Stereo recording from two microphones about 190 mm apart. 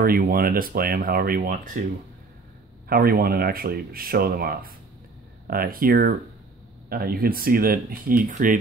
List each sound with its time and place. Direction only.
0.0 s speech: 50° right (ahead or behind)
2.9 s speech: 50° right (ahead or behind)